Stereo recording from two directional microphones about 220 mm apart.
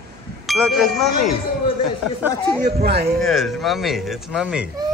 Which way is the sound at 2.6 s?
40° right (ahead or behind).